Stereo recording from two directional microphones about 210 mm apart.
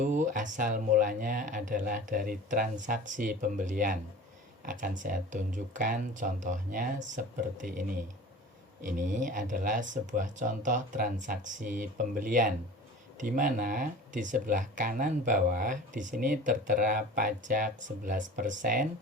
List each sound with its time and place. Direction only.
0.0 s speech: 35° right (ahead or behind)